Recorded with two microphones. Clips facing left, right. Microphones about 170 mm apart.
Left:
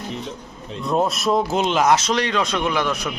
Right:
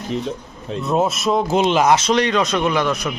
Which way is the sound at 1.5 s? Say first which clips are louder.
Right 5 dB; 15° right (ahead or behind).